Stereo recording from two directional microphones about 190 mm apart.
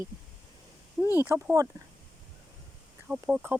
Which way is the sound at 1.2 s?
10° right (ahead or behind).